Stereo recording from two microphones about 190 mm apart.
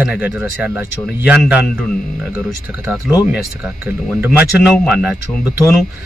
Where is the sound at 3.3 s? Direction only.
5° right (ahead or behind).